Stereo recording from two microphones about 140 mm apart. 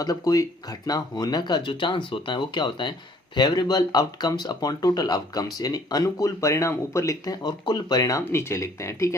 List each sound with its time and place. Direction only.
0.0 s speech: 25° left (ahead or behind)